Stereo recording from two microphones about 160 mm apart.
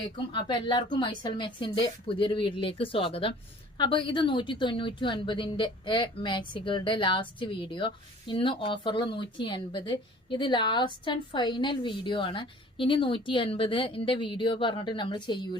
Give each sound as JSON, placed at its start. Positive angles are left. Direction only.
{"t": 0.3, "sound": "a woman's voice", "side_deg": 30}